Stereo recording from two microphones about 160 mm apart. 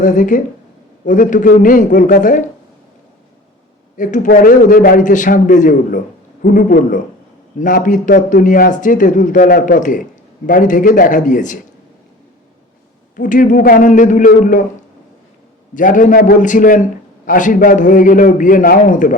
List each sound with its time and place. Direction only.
0.0 s a man's voice: 55° left (ahead or behind)
3.9 s a man's voice: 55° left (ahead or behind)
13.1 s a man's voice: 55° left (ahead or behind)
15.7 s a man's voice: 55° left (ahead or behind)